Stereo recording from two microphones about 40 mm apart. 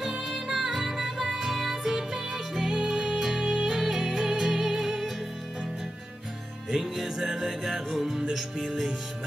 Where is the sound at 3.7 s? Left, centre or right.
Centre.